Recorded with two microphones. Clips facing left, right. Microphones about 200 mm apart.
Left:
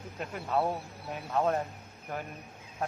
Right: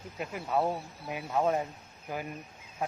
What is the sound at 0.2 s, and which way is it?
Speech, 5° right (ahead or behind).